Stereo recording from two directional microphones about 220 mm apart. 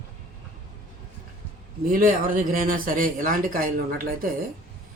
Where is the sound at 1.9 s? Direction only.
40° right (ahead or behind).